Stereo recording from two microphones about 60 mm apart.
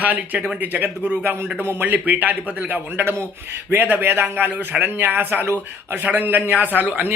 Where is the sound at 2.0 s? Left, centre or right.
Right.